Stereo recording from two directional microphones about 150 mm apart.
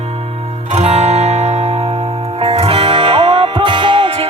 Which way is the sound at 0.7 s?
50° right (ahead or behind).